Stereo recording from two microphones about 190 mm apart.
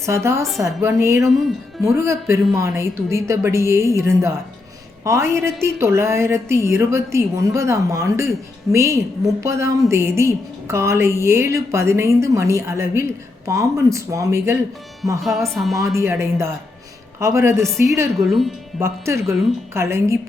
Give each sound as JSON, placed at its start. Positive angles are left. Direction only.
{"t": 0.0, "sound": "a woman's voice", "side_deg": -15}
{"t": 15.4, "sound": "a woman's voice", "side_deg": 0}
{"t": 16.0, "sound": "a woman's voice", "side_deg": -15}
{"t": 18.3, "sound": "a woman's voice", "side_deg": 0}
{"t": 18.8, "sound": "a woman's voice", "side_deg": -15}